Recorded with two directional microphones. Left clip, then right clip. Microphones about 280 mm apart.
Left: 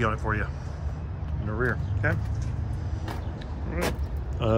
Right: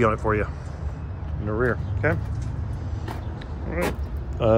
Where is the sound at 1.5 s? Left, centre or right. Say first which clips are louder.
Right 4 dB; centre.